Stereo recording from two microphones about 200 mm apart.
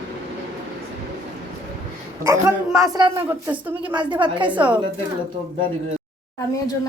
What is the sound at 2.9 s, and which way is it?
A woman's voice, 15° right (ahead or behind).